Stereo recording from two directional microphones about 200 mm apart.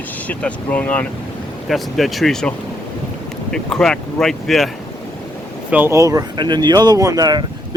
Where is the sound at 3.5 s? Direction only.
5° left (ahead or behind).